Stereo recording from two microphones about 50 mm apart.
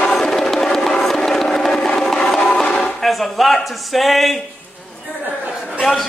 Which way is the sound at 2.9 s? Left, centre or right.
Centre.